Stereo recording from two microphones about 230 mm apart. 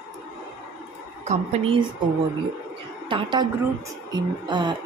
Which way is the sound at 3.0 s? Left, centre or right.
Right.